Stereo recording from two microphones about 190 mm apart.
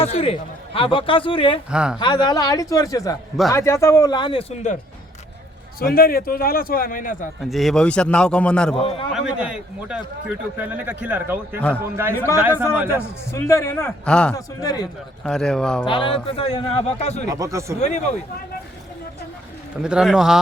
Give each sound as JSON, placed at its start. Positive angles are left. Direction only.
{"t": 0.0, "sound": "a man's voice", "side_deg": 30}
{"t": 1.7, "sound": "a man's voice", "side_deg": -5}
{"t": 2.0, "sound": "a man's voice", "side_deg": 25}
{"t": 5.8, "sound": "a man's voice", "side_deg": 50}
{"t": 7.5, "sound": "a man's voice", "side_deg": 0}
{"t": 12.9, "sound": "a man's voice", "side_deg": 15}
{"t": 14.3, "sound": "a man's voice", "side_deg": 20}
{"t": 15.2, "sound": "a man's voice", "side_deg": 5}
{"t": 15.9, "sound": "a man's voice", "side_deg": 25}
{"t": 17.2, "sound": "a man's voice", "side_deg": -15}
{"t": 17.7, "sound": "speech", "side_deg": 35}
{"t": 19.8, "sound": "a man's voice", "side_deg": -5}